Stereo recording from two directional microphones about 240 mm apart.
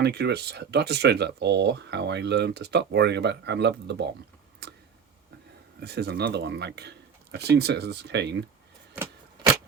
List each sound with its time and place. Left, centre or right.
0.0 s speech: right
4.6 s a sound: right
5.8 s speech: right